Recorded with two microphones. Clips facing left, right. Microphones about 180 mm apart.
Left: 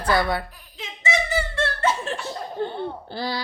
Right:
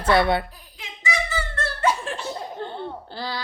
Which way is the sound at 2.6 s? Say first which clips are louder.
Left 3 dB; 10° left (ahead or behind).